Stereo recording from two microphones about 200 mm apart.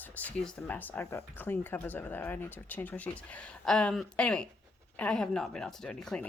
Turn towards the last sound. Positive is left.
turn(degrees=5)  # may be behind; listen again after turning